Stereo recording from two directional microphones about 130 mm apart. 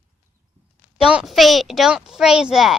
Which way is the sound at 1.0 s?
5° right (ahead or behind).